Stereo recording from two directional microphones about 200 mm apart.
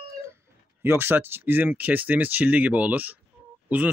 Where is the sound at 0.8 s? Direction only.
10° right (ahead or behind).